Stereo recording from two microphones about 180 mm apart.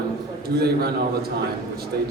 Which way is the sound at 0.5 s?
60° right (ahead or behind).